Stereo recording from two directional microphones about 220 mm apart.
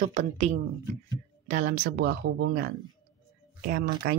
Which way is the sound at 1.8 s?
55° right (ahead or behind).